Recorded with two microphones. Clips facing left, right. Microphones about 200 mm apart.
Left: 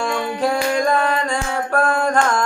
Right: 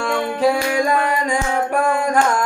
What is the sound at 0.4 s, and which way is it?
Music, 10° right (ahead or behind).